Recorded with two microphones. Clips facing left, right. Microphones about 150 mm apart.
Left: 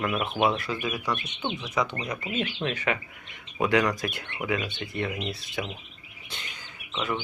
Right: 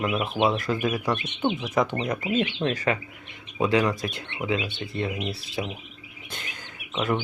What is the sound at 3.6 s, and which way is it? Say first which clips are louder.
Speech: right 1 dB; 25° right (ahead or behind).